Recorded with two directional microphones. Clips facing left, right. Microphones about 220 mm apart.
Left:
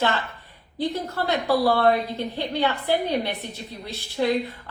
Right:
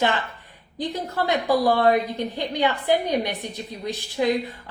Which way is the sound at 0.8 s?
15° right (ahead or behind).